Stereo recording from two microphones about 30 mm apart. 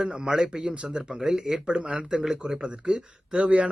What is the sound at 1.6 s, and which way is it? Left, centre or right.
Speech, right.